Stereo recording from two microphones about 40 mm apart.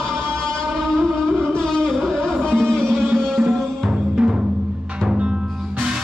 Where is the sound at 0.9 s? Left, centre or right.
Centre.